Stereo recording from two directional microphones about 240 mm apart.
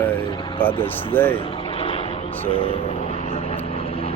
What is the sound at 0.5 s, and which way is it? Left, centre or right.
Speech, centre.